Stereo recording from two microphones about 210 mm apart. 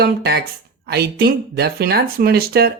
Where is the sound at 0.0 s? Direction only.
50° right (ahead or behind).